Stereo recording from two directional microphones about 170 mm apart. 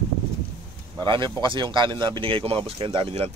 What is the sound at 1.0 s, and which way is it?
Speech, 30° right (ahead or behind).